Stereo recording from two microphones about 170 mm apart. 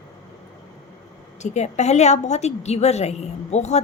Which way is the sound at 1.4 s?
45° left (ahead or behind).